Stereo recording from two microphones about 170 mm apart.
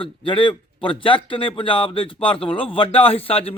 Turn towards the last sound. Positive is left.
turn(degrees=35)  # may be behind; listen again after turning